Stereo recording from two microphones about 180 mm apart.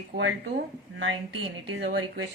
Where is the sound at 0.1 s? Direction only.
55° right (ahead or behind).